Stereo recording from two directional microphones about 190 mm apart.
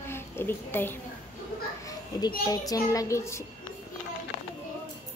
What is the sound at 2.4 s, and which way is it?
A child's voice, 15° left (ahead or behind).